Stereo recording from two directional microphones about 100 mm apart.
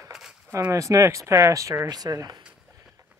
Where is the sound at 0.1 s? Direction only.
5° right (ahead or behind).